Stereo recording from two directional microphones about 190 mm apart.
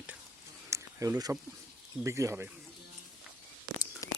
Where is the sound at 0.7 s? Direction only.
15° right (ahead or behind).